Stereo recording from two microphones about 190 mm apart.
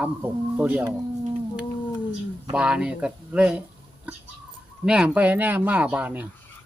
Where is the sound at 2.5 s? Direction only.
5° right (ahead or behind).